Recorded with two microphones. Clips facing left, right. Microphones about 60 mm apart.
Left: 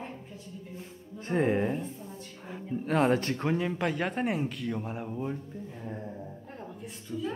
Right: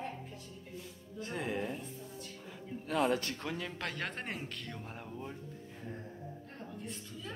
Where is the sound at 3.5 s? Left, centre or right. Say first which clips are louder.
Left 10 dB; left.